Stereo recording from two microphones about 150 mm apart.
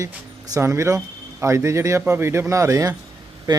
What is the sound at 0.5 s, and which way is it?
Speech, 20° right (ahead or behind).